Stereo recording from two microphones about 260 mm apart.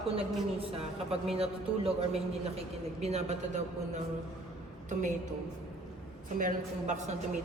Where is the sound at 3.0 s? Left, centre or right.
Right.